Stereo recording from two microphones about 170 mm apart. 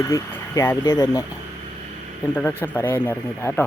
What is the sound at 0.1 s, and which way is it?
Speech, 15° left (ahead or behind).